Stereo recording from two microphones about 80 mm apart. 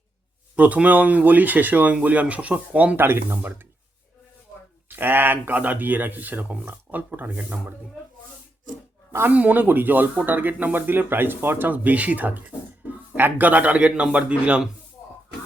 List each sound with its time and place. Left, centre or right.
0.5 s a man's voice: centre
3.0 s speech: right
4.9 s speech: right
9.3 s a man's voice: centre